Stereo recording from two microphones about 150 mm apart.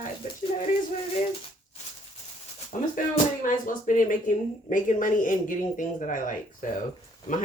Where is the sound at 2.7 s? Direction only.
55° left (ahead or behind).